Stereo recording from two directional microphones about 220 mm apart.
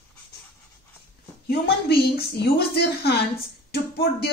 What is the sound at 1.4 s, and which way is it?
A woman's voice, 45° left (ahead or behind).